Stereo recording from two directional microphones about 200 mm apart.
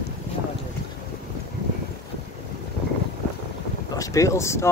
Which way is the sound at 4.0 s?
15° left (ahead or behind).